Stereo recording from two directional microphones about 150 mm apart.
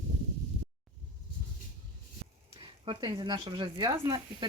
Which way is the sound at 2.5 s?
35° right (ahead or behind).